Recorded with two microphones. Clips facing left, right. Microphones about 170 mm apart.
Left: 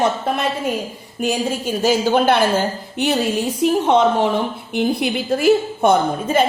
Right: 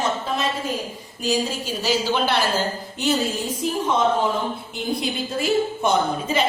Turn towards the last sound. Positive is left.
turn(degrees=50)  # may be behind; listen again after turning